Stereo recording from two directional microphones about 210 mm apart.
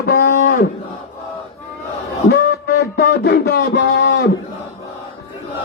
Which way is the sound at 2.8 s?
55° left (ahead or behind).